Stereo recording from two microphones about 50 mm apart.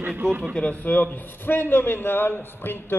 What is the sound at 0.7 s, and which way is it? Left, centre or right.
A man's voice, left.